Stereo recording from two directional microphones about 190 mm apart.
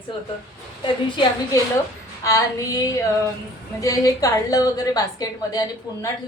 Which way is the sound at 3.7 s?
20° left (ahead or behind).